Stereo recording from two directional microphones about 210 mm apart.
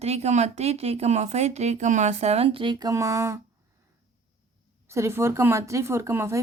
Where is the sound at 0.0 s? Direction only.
30° right (ahead or behind); by 3.4 s 15° right (ahead or behind).